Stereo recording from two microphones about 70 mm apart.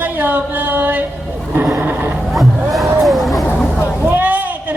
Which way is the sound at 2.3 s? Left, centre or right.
Centre.